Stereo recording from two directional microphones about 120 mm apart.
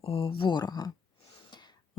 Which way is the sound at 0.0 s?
50° left (ahead or behind).